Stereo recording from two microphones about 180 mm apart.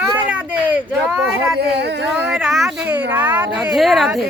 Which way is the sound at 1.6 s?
70° right (ahead or behind).